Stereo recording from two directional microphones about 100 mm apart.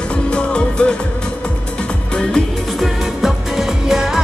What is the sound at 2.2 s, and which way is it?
Music, 5° left (ahead or behind).